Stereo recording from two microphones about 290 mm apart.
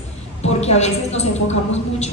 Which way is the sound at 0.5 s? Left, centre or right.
Left.